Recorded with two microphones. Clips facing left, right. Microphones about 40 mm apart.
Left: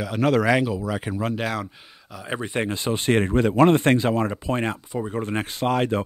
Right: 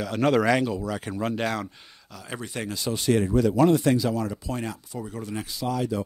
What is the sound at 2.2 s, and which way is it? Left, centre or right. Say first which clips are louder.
Speech: left 7 dB; left.